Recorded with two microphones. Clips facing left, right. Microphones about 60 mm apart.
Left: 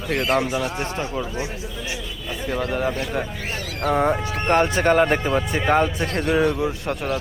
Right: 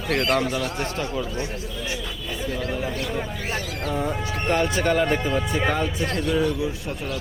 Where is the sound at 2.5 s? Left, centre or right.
Left.